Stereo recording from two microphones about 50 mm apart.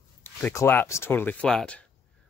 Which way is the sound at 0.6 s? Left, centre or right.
Left.